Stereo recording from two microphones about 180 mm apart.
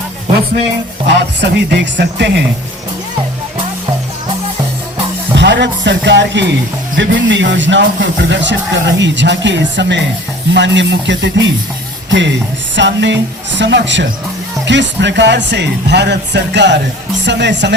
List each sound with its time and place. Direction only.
1.0 s speech: 75° right (ahead or behind)
5.4 s speech: 75° right (ahead or behind)
6.9 s speech: 90° right
12.7 s speech: 85° right